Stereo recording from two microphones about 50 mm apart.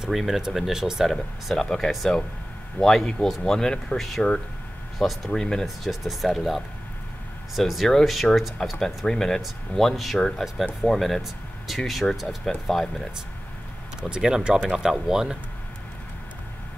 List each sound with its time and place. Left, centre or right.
0.0 s speech: centre
1.5 s speech: centre
4.9 s speech: centre
5.3 s speech: centre
5.9 s speech: centre
8.7 s speech: centre
14.0 s speech: centre